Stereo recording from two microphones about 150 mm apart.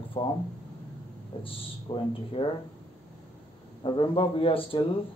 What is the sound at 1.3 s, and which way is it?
A man's voice, 40° left (ahead or behind).